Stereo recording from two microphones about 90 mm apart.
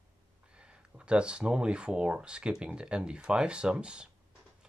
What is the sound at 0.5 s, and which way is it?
Speech, 10° right (ahead or behind).